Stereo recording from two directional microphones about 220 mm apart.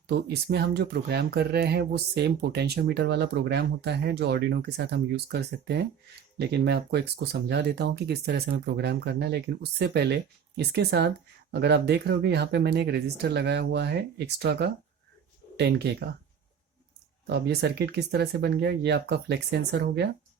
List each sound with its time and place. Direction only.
0.1 s speech: 45° right (ahead or behind)
17.2 s speech: 50° right (ahead or behind)